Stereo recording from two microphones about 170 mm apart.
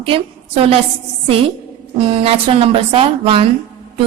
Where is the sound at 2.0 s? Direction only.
35° right (ahead or behind).